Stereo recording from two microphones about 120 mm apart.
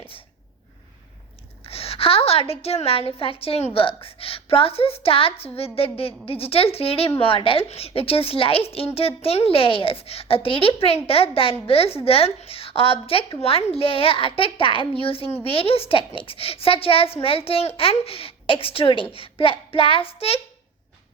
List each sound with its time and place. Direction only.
1.6 s a woman's voice: 55° left (ahead or behind)